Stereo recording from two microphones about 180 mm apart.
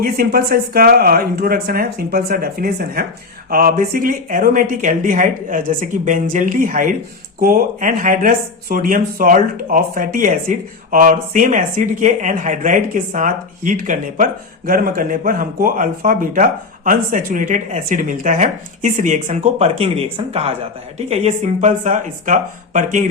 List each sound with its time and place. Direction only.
0.0 s speech: 55° right (ahead or behind)